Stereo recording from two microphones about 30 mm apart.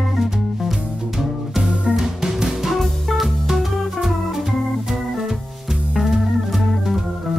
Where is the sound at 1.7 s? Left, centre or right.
Right.